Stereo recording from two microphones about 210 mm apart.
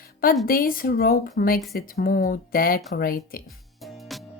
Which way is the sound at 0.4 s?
45° left (ahead or behind).